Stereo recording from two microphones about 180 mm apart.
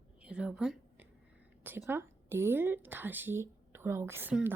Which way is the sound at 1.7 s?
15° right (ahead or behind).